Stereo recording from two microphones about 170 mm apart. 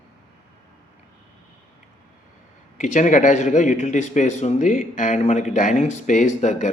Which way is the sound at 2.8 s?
45° left (ahead or behind).